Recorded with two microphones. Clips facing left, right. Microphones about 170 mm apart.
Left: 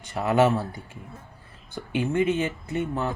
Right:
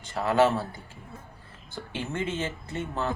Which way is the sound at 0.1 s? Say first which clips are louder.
Left 2 dB; 20° left (ahead or behind).